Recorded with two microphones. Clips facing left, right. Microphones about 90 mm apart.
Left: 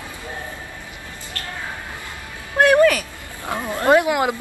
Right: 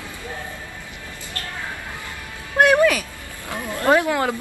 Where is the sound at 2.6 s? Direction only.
15° right (ahead or behind).